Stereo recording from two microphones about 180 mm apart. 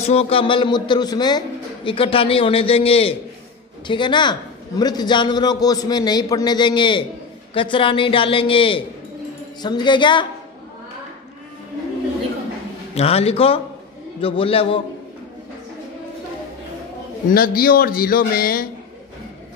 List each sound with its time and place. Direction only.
0.0 s a man's voice: 35° left (ahead or behind)
12.9 s a man's voice: 35° left (ahead or behind)
17.3 s a man's voice: 55° left (ahead or behind)